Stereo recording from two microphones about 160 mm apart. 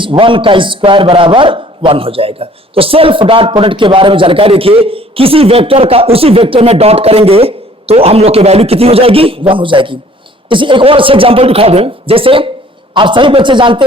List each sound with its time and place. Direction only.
0.0 s a man's voice: 30° right (ahead or behind)